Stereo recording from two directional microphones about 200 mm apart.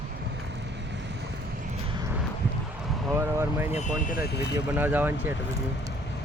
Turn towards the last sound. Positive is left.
turn(degrees=-10)  # may be behind; listen again after turning